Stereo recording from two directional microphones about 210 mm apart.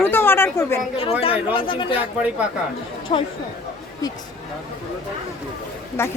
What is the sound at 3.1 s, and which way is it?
Speech, 35° left (ahead or behind).